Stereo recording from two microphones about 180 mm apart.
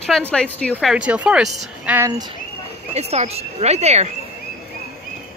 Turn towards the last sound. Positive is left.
turn(degrees=-35)  # may be behind; listen again after turning